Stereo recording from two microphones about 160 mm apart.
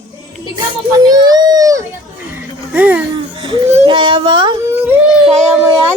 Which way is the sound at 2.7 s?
10° right (ahead or behind).